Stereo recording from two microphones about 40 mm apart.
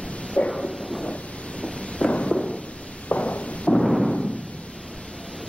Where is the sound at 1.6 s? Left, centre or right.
Left.